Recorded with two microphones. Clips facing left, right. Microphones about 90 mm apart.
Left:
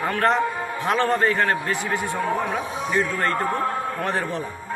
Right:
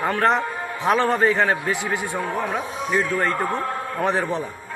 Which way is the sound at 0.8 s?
10° right (ahead or behind).